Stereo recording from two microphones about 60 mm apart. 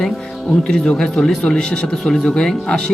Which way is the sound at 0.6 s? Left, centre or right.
Centre.